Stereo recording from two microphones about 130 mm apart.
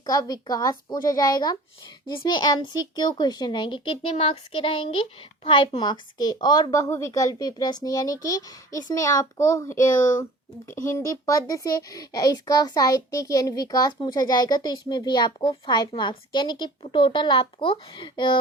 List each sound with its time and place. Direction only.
0.0 s a woman's voice: 30° left (ahead or behind)
10.8 s a child's voice: 20° left (ahead or behind); by 18.3 s 40° left (ahead or behind)